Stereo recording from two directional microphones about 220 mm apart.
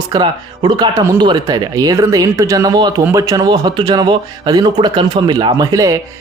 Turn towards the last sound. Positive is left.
turn(degrees=-15)  # may be behind; listen again after turning